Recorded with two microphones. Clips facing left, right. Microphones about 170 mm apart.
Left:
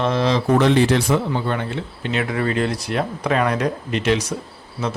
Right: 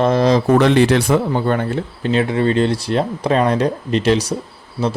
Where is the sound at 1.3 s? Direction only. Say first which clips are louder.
Right 5 dB; 45° right (ahead or behind).